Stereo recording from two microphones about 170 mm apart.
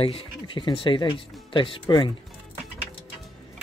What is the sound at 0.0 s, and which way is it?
Speech, 30° left (ahead or behind).